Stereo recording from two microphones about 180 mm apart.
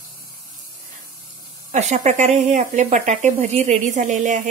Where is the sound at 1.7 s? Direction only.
40° right (ahead or behind).